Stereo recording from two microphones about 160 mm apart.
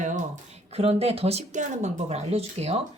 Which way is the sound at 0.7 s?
40° right (ahead or behind).